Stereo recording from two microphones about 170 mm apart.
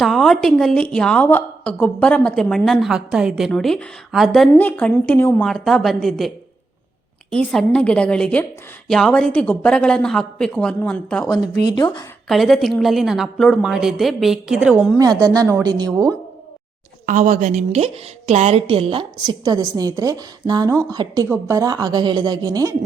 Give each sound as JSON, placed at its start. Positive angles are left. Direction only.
{"t": 0.0, "sound": "a woman's voice", "side_deg": 0}
{"t": 11.7, "sound": "a woman's voice", "side_deg": 25}
{"t": 12.3, "sound": "a woman's voice", "side_deg": 0}
{"t": 14.9, "sound": "a woman's voice", "side_deg": -20}
{"t": 17.1, "sound": "a woman's voice", "side_deg": -45}